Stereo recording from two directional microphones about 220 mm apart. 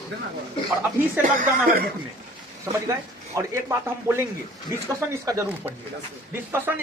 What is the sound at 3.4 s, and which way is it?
A man's voice, 15° right (ahead or behind).